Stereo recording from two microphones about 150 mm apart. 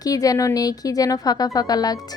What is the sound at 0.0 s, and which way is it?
A woman's voice, 25° left (ahead or behind).